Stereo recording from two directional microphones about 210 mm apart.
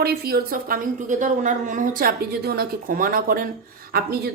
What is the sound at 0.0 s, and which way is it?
A woman's voice, 50° right (ahead or behind).